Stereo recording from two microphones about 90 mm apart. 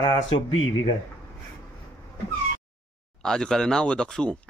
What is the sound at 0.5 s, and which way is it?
Speech, 90° left.